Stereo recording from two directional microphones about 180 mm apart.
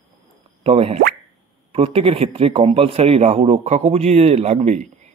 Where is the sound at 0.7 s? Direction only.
30° right (ahead or behind).